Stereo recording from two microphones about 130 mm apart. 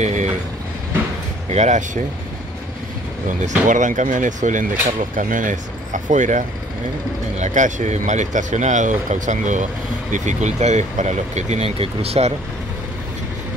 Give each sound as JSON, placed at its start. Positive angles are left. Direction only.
{"t": 0.0, "sound": "vehicle", "side_deg": -65}
{"t": 1.5, "sound": "speech", "side_deg": -65}
{"t": 3.3, "sound": "speech", "side_deg": -75}
{"t": 5.1, "sound": "speech", "side_deg": -90}